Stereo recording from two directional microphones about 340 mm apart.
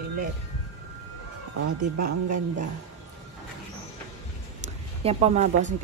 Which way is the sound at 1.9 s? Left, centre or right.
Right.